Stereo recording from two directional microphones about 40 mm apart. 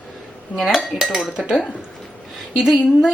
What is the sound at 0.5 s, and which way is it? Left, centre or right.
Speech, centre.